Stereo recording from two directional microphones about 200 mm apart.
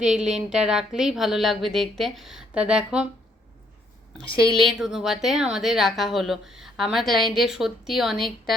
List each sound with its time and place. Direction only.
0.0 s a woman's voice: 5° right (ahead or behind)
4.2 s a woman's voice: 25° left (ahead or behind)
4.6 s a woman's voice: centre (ahead or behind)